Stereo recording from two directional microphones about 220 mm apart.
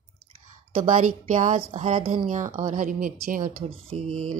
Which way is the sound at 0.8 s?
35° right (ahead or behind).